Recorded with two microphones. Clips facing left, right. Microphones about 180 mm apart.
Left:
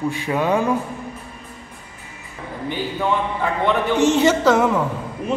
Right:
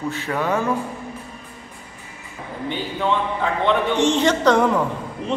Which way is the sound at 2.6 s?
5° left (ahead or behind).